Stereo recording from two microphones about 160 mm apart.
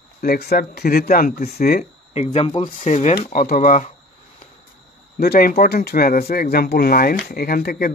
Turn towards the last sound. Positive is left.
turn(degrees=80)